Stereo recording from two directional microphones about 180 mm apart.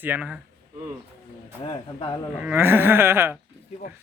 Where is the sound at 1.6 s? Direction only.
25° left (ahead or behind).